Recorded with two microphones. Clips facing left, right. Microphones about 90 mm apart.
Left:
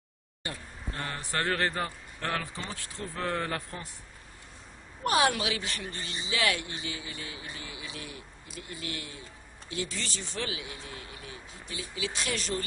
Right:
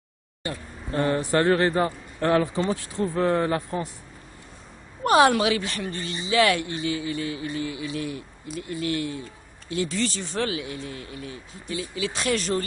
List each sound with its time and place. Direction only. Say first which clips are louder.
0.9 s speech: right 12 dB; 25° right (ahead or behind)
5.0 s speech: right 8 dB; 50° right (ahead or behind)